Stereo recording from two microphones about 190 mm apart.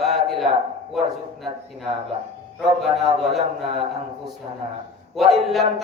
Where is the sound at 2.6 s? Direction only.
Centre (ahead or behind).